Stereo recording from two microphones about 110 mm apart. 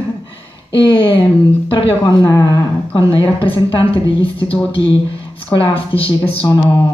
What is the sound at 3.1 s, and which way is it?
A woman's voice, 55° left (ahead or behind).